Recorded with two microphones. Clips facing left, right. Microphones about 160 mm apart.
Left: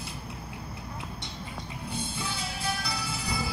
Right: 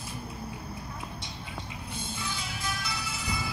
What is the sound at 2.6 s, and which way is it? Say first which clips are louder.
Music: left 4 dB; 35° left (ahead or behind).